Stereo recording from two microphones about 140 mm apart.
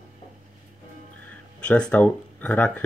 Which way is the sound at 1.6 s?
10° left (ahead or behind).